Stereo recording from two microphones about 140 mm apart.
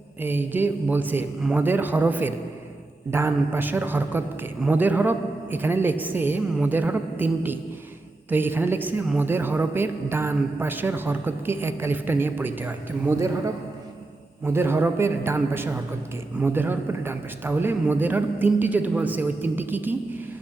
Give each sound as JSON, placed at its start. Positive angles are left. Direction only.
{"t": 0.2, "sound": "a woman's voice", "side_deg": -15}
{"t": 14.4, "sound": "a woman's voice", "side_deg": -15}